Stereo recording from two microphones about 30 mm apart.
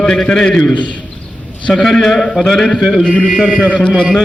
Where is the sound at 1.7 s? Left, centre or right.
Centre.